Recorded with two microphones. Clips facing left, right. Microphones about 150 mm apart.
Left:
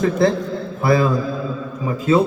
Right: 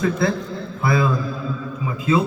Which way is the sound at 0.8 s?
40° left (ahead or behind).